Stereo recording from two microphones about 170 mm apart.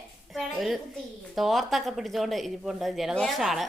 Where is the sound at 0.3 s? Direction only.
Centre (ahead or behind).